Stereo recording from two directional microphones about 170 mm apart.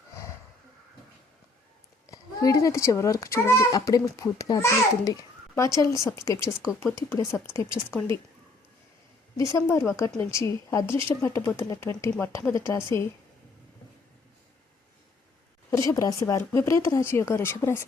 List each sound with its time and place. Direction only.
2.0 s a child's voice: 20° left (ahead or behind)
9.4 s speech: 15° left (ahead or behind)
15.9 s speech: 20° left (ahead or behind)